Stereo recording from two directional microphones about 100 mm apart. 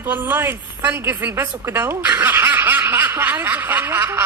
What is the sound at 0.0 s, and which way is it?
A woman's voice, 20° right (ahead or behind).